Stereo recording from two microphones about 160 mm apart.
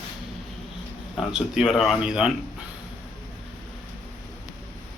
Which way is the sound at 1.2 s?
5° right (ahead or behind).